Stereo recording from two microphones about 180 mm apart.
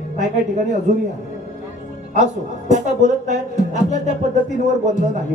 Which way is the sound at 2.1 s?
40° right (ahead or behind).